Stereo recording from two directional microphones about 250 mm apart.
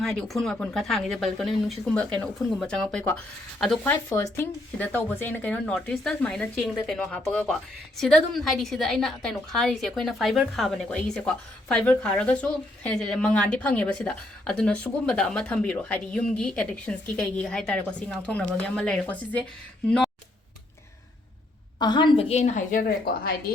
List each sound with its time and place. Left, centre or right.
0.0 s speech: centre
21.8 s a woman's voice: centre; by 23.4 s left